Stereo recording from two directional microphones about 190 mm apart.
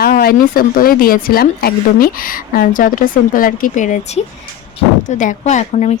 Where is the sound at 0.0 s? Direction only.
50° left (ahead or behind).